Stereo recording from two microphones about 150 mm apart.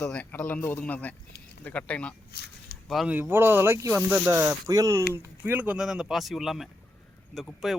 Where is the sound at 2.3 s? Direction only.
90° left.